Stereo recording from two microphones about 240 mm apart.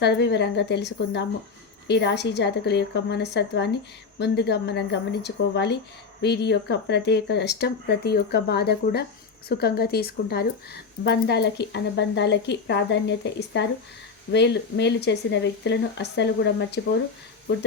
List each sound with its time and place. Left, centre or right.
0.0 s speech: left